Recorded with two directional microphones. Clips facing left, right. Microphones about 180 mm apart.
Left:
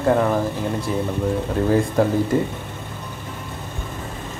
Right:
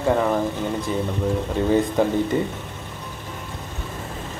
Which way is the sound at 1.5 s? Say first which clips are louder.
Left 1 dB; centre (ahead or behind).